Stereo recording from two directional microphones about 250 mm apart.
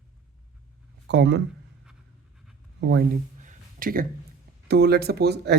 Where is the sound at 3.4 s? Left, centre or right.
Right.